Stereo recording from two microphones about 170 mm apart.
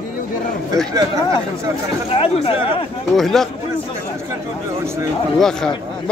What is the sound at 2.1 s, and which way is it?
Speech, 35° left (ahead or behind).